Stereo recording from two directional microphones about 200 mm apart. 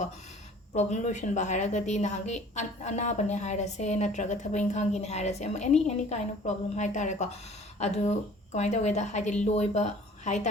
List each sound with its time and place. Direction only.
0.7 s a woman's voice: 35° left (ahead or behind)